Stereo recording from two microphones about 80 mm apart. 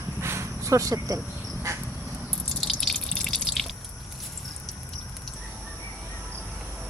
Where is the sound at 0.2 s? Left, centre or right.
Right.